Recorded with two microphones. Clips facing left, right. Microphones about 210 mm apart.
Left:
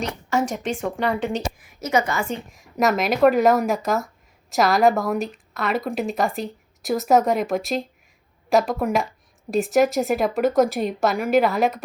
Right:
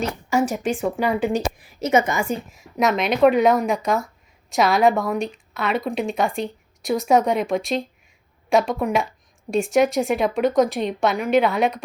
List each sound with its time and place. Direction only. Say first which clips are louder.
0.0 s speech: right 2 dB; 10° right (ahead or behind)
1.6 s a woman's voice: right 3 dB; 25° right (ahead or behind)
2.5 s a woman's voice: left 3 dB; centre (ahead or behind)